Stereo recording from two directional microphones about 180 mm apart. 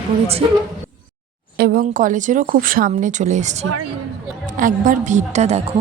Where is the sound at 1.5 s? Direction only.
60° right (ahead or behind); by 5.7 s 35° right (ahead or behind).